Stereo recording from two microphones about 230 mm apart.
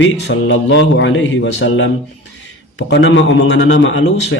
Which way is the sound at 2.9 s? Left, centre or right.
Left.